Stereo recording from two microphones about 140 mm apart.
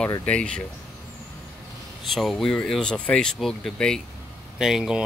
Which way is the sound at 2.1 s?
Centre (ahead or behind).